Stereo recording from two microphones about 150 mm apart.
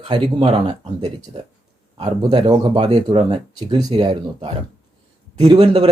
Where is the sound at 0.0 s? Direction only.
40° right (ahead or behind).